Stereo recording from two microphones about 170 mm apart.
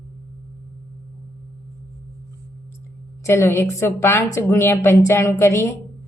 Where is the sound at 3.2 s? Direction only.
15° left (ahead or behind).